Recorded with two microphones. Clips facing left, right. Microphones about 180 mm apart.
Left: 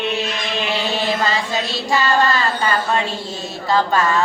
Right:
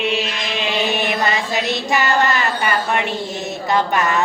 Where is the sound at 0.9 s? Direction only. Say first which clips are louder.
Even; 20° right (ahead or behind).